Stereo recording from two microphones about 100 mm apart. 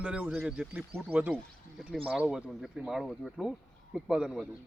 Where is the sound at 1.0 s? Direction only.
20° right (ahead or behind).